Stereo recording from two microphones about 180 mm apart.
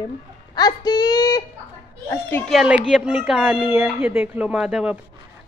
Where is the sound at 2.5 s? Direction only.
5° right (ahead or behind).